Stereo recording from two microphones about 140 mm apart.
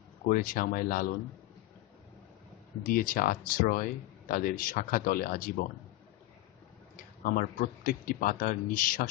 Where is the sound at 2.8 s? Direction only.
90° left.